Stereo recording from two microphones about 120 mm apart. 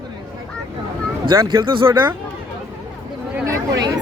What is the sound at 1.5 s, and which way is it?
Speech, 45° right (ahead or behind).